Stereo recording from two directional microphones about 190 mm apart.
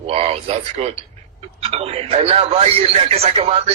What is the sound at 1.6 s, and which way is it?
A man's voice, 30° right (ahead or behind).